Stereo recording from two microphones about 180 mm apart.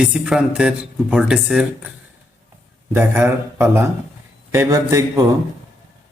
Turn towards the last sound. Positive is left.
turn(degrees=-20)  # may be behind; listen again after turning